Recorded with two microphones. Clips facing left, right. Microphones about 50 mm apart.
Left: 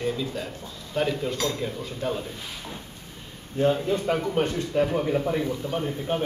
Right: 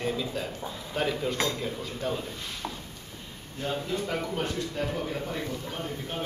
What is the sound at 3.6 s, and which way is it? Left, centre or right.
Speech, left.